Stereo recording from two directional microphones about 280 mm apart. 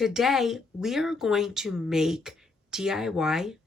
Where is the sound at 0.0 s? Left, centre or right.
Centre.